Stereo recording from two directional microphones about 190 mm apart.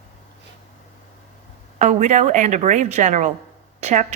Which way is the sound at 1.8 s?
40° right (ahead or behind).